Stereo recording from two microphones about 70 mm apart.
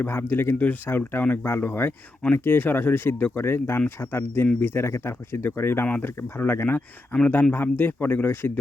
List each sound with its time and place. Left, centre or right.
0.0 s speech: left